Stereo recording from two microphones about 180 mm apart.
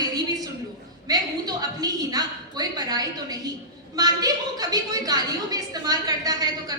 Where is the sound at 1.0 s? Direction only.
20° right (ahead or behind).